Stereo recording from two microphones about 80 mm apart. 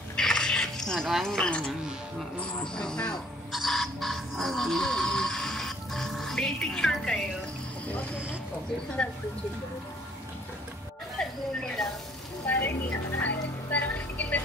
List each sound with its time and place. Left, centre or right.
0.1 s music: centre
2.7 s speech: centre
7.8 s speech: centre
11.1 s speech: centre
12.4 s speech: left
13.2 s music: centre